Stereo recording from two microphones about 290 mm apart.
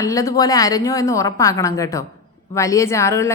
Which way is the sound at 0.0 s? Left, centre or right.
Centre.